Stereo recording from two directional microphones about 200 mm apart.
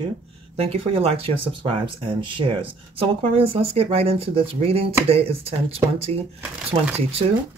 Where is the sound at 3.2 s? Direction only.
30° right (ahead or behind).